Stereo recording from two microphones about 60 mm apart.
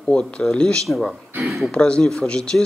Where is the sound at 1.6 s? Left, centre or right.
Centre.